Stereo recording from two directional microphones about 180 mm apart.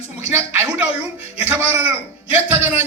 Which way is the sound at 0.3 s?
10° right (ahead or behind).